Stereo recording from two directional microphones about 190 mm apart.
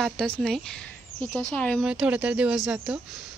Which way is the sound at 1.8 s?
5° right (ahead or behind).